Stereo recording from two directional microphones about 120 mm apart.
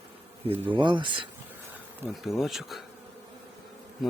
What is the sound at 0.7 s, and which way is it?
Speech, 40° right (ahead or behind).